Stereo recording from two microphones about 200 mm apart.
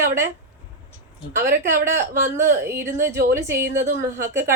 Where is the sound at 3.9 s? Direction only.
40° right (ahead or behind).